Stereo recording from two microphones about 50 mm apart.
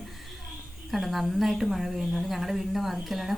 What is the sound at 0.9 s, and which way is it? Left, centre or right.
A woman's voice, centre.